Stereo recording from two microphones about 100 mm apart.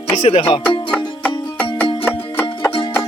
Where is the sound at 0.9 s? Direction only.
15° left (ahead or behind).